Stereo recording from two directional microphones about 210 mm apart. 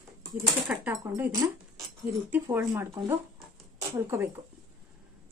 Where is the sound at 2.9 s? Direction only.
20° right (ahead or behind).